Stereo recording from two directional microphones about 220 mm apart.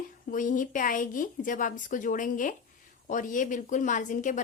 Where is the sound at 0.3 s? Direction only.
35° left (ahead or behind).